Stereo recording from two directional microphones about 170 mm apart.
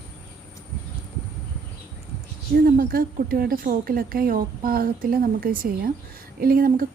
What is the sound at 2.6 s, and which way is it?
A woman's voice, 60° right (ahead or behind).